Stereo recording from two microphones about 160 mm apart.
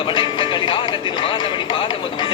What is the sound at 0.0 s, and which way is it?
Music, 30° left (ahead or behind).